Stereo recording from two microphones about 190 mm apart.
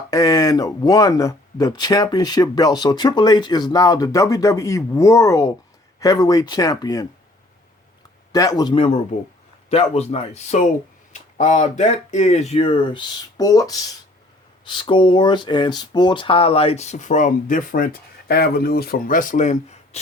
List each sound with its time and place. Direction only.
0.1 s speech: 20° left (ahead or behind)
8.3 s speech: 20° left (ahead or behind); by 20.0 s 40° left (ahead or behind)